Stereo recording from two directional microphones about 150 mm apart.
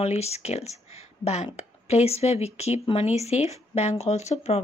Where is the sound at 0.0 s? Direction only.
45° left (ahead or behind).